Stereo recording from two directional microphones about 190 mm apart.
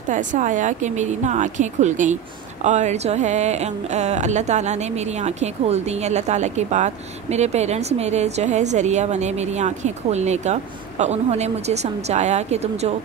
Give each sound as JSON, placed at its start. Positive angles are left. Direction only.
{"t": 0.1, "sound": "speech", "side_deg": -40}